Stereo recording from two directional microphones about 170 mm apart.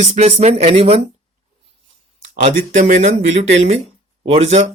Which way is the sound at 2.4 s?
40° right (ahead or behind).